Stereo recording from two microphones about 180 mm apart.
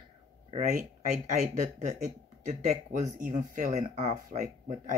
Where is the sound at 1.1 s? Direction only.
40° right (ahead or behind).